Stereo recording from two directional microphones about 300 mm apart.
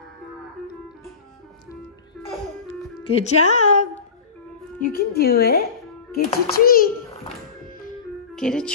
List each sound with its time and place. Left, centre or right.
3.0 s speech: centre
4.7 s a child's voice: left
8.4 s speech: centre